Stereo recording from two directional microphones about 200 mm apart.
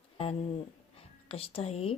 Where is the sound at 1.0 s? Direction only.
30° left (ahead or behind).